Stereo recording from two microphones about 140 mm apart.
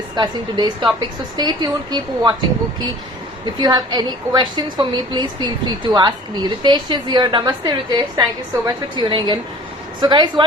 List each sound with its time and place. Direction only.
0.2 s a woman's voice: 30° right (ahead or behind)
3.4 s a woman's voice: 30° right (ahead or behind)